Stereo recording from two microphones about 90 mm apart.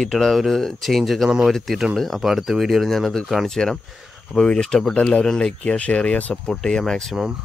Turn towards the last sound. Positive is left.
turn(degrees=5)  # may be behind; listen again after turning